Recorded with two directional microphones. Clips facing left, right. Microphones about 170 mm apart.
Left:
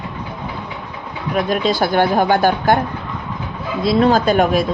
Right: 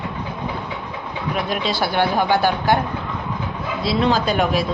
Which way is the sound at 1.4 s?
45° left (ahead or behind).